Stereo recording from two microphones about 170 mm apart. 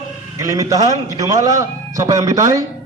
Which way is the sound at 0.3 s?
20° right (ahead or behind).